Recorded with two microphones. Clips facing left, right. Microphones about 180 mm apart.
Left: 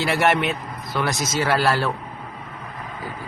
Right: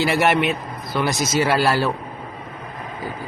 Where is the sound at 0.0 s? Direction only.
5° right (ahead or behind).